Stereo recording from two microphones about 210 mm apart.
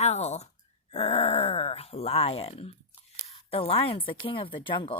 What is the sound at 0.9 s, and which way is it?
Groan, 30° left (ahead or behind).